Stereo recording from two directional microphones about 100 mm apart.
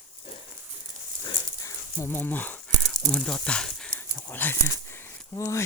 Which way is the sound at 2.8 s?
5° left (ahead or behind).